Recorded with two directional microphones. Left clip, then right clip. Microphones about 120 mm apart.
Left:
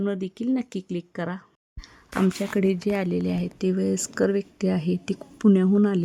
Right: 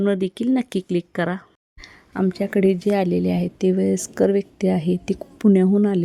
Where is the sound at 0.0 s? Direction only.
35° right (ahead or behind).